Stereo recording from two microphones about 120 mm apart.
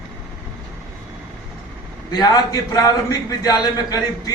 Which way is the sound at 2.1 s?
35° left (ahead or behind).